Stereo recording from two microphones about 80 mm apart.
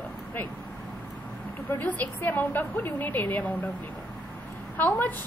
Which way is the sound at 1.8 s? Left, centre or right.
Left.